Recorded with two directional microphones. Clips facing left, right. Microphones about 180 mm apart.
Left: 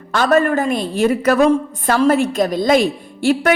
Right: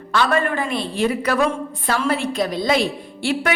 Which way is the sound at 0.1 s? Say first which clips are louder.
Left 5 dB; 45° left (ahead or behind).